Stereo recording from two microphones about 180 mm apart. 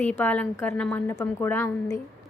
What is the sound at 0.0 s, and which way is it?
A woman's voice, 10° left (ahead or behind).